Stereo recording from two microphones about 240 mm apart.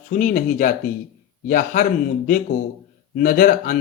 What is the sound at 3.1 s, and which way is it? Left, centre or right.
Speech, left.